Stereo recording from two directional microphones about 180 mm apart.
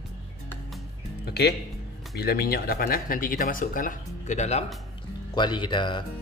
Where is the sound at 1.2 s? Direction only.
65° left (ahead or behind).